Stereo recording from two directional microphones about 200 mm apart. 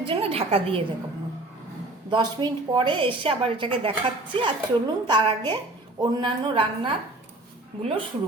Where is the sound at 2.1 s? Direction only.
20° right (ahead or behind).